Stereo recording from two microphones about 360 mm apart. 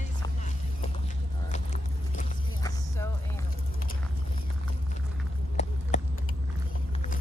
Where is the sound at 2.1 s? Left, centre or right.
Centre.